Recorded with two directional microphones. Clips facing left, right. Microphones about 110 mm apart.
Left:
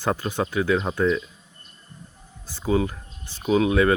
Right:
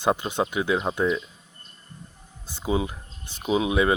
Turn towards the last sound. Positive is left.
turn(degrees=-15)  # may be behind; listen again after turning